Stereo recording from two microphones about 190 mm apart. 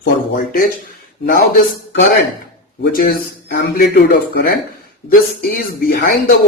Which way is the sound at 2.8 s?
50° left (ahead or behind).